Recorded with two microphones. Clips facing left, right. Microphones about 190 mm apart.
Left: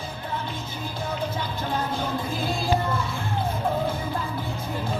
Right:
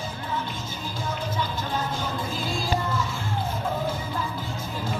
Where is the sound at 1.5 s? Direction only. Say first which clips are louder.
Left 2 dB; 60° left (ahead or behind).